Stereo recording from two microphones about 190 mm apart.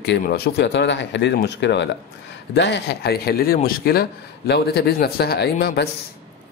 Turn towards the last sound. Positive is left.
turn(degrees=60)  # may be behind; listen again after turning